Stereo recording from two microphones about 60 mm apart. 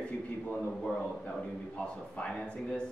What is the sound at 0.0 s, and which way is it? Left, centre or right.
A man's voice, left.